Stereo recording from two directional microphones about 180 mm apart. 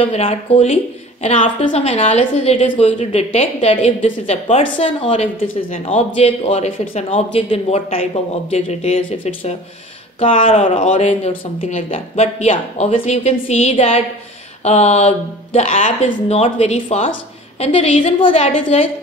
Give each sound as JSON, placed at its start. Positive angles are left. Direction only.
{"t": 0.0, "sound": "speech", "side_deg": 35}